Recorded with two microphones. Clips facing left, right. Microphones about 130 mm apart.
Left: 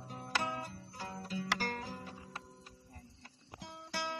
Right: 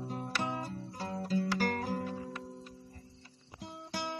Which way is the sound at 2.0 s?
45° right (ahead or behind).